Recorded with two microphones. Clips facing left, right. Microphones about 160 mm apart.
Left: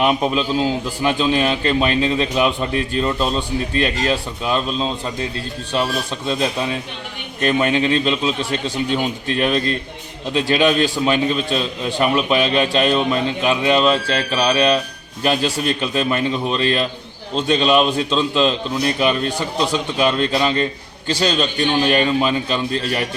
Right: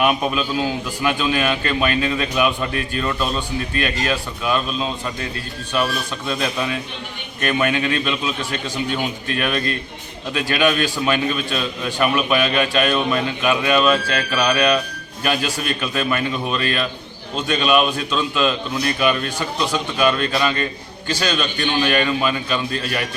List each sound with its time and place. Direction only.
0.0 s a man's voice: 25° left (ahead or behind)